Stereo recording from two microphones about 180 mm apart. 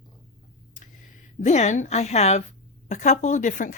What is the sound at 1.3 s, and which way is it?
A woman's voice, 40° left (ahead or behind).